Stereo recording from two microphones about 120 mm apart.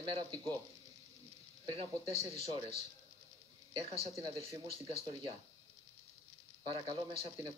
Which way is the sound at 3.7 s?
55° right (ahead or behind).